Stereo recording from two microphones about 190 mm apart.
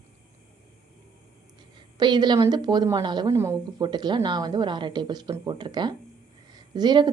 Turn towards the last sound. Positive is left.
turn(degrees=-20)  # may be behind; listen again after turning